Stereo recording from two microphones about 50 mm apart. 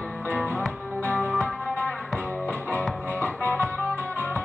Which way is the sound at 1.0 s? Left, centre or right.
Left.